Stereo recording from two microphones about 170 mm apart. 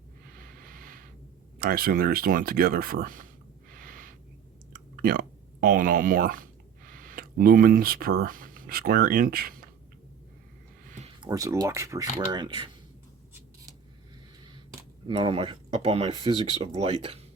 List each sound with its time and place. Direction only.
0.3 s a sound: 55° right (ahead or behind)
1.5 s speech: 60° right (ahead or behind)
3.7 s a sound: 55° right (ahead or behind)
4.7 s speech: 60° right (ahead or behind)
11.2 s speech: 20° right (ahead or behind)
15.0 s speech: 30° right (ahead or behind)